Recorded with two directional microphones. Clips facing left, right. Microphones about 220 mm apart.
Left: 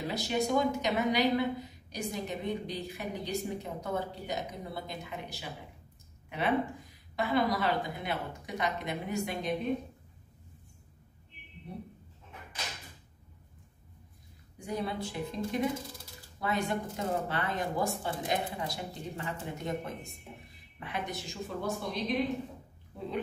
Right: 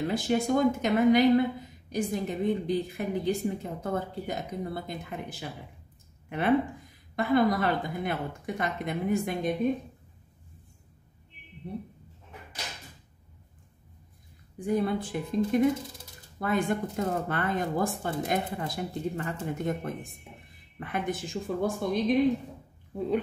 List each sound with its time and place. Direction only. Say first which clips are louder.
0.1 s speech: right 2 dB; 50° right (ahead or behind)
14.6 s speech: right 7 dB; 50° right (ahead or behind)